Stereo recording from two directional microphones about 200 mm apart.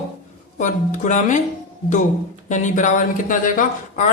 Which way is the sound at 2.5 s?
40° left (ahead or behind).